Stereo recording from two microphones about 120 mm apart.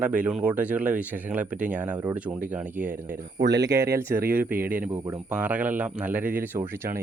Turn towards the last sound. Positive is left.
turn(degrees=-15)  # may be behind; listen again after turning